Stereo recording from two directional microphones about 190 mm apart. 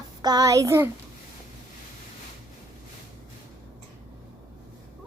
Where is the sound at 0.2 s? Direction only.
20° right (ahead or behind).